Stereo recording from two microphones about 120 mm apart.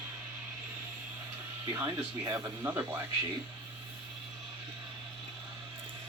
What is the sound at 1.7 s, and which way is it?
Speech, 20° right (ahead or behind).